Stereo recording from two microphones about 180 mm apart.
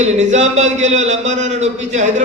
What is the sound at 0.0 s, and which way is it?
A man's voice, 40° right (ahead or behind).